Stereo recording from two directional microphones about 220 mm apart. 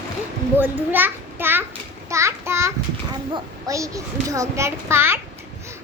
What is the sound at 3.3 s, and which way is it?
A child's voice, 15° right (ahead or behind).